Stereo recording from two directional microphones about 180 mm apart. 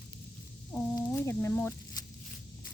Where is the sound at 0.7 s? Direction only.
10° left (ahead or behind).